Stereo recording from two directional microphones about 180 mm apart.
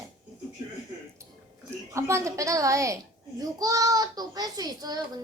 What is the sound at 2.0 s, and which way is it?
A child's voice, 15° right (ahead or behind).